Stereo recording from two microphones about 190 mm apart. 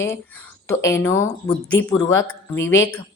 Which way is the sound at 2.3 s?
75° left (ahead or behind).